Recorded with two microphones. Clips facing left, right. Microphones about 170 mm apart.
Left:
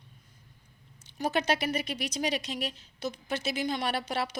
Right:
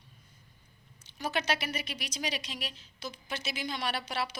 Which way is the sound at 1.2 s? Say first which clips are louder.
Left 4 dB; 45° left (ahead or behind).